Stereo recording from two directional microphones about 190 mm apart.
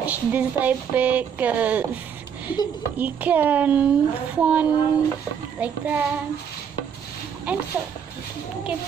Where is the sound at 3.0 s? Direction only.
10° right (ahead or behind).